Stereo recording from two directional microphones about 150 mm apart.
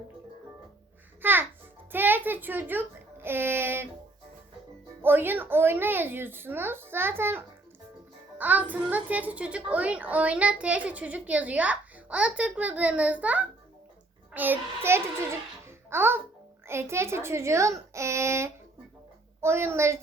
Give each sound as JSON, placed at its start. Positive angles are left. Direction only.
{"t": 1.2, "sound": "a child's voice", "side_deg": -15}
{"t": 5.0, "sound": "a child's voice", "side_deg": -15}